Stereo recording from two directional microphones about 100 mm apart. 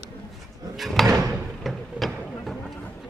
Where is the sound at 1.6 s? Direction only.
Centre (ahead or behind).